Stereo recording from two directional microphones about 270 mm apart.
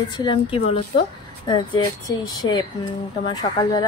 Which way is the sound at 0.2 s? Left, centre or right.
Centre.